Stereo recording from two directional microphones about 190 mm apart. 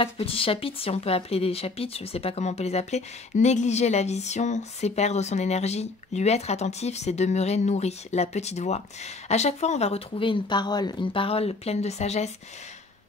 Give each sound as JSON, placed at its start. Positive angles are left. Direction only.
{"t": 0.0, "sound": "speech", "side_deg": 30}